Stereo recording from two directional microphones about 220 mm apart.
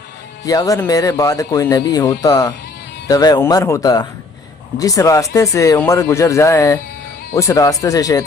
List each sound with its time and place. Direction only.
0.4 s speech: 15° left (ahead or behind)